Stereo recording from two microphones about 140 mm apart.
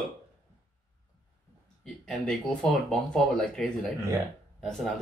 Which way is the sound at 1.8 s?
5° left (ahead or behind).